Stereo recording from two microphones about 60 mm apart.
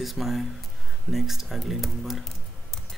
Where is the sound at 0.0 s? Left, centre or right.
Centre.